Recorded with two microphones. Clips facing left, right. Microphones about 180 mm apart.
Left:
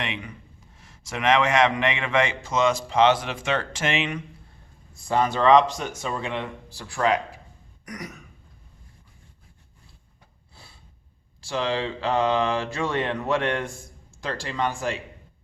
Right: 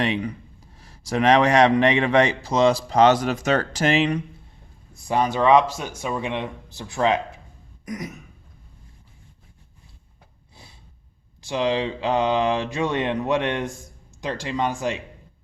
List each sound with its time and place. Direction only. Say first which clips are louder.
0.0 s a man's voice: right 9 dB; 35° right (ahead or behind)
5.0 s speech: right 1 dB; 15° right (ahead or behind)
11.4 s speech: right 3 dB; 20° right (ahead or behind)